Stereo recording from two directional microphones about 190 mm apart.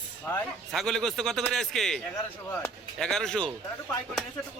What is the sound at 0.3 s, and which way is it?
Speech, 5° left (ahead or behind).